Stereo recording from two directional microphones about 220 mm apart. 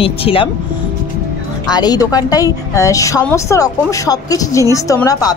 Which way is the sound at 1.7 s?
20° left (ahead or behind).